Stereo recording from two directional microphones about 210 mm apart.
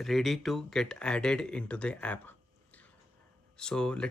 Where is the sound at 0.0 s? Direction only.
Centre (ahead or behind).